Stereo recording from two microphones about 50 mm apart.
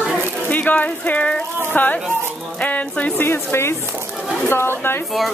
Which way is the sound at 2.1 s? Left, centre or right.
Right.